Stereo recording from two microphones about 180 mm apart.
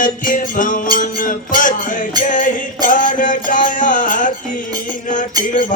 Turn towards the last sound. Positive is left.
turn(degrees=45)  # may be behind; listen again after turning